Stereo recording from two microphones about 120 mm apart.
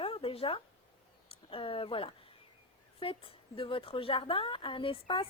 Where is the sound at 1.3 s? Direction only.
50° left (ahead or behind).